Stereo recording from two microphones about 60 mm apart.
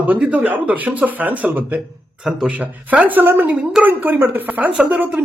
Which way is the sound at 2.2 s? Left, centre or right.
Centre.